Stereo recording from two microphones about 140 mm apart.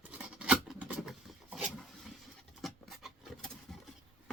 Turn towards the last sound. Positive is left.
turn(degrees=0)  # may be behind; listen again after turning